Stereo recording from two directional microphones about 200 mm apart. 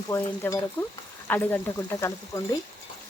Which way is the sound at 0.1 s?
15° left (ahead or behind).